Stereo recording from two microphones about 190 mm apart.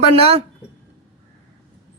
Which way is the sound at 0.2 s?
30° right (ahead or behind).